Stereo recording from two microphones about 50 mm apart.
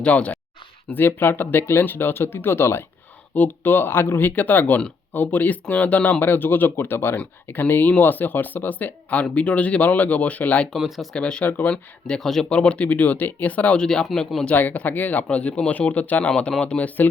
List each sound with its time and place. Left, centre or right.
0.0 s speech: left
0.9 s speech: left
3.3 s speech: left
10.8 s speech: centre
11.1 s speech: left
11.4 s speech: left
11.7 s speech: centre
12.5 s speech: left
13.7 s speech: centre
14.5 s speech: left
16.3 s speech: centre